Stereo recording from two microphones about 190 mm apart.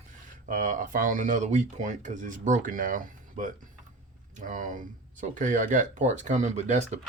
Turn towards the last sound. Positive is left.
turn(degrees=-35)  # may be behind; listen again after turning